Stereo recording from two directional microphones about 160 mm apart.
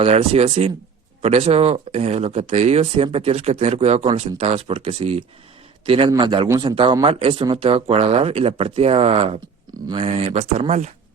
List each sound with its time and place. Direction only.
0.0 s speech: 40° right (ahead or behind)